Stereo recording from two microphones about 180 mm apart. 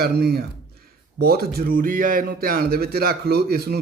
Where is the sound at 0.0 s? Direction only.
60° right (ahead or behind).